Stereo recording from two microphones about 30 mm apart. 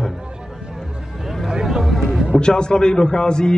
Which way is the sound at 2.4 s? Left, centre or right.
Left.